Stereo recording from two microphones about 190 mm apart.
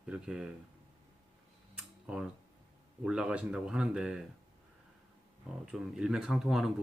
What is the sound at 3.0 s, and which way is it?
Speech, 5° right (ahead or behind).